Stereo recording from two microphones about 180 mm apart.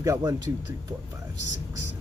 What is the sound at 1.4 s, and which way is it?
Speech, 85° left.